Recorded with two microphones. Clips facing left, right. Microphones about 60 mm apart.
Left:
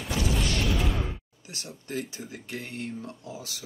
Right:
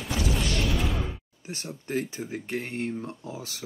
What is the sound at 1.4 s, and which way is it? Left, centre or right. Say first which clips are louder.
Speech: right 5 dB; right.